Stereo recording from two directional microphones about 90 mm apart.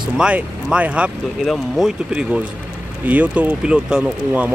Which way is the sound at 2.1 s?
10° right (ahead or behind).